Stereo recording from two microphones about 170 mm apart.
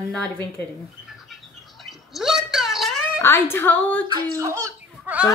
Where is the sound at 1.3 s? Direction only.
Centre (ahead or behind).